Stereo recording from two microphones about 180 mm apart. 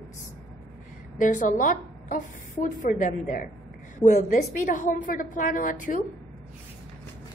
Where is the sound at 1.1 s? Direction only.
45° left (ahead or behind).